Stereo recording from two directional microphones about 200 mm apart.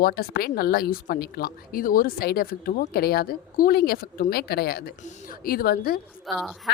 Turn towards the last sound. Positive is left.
turn(degrees=0)  # may be behind; listen again after turning